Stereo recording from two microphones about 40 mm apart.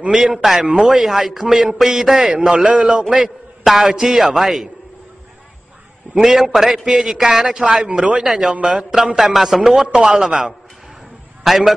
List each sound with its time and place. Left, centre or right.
0.1 s a man's voice: centre
3.1 s a man's voice: centre
6.2 s a man's voice: centre
7.8 s speech: right
8.7 s a man's voice: centre
9.9 s a man's voice: centre